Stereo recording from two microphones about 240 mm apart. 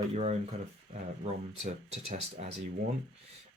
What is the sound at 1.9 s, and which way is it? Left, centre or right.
Speech, right.